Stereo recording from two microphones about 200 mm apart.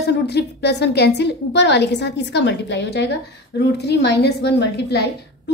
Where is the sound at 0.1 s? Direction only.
55° left (ahead or behind).